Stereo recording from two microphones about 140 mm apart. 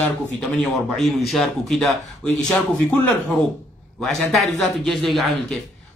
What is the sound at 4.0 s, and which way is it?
Speech, centre (ahead or behind).